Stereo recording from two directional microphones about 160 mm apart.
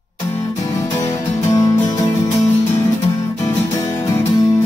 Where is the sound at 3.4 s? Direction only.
20° left (ahead or behind).